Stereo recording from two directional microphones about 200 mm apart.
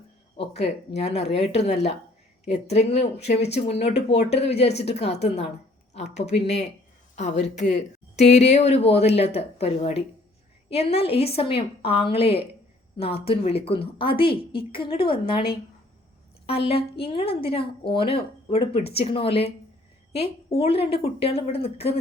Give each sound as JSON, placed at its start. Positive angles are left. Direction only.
{"t": 0.3, "sound": "a woman's voice", "side_deg": 30}
{"t": 16.6, "sound": "a woman's voice", "side_deg": 30}
{"t": 20.6, "sound": "a woman's voice", "side_deg": 30}